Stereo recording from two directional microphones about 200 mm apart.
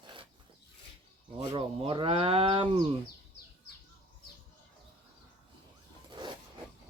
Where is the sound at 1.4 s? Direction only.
25° right (ahead or behind).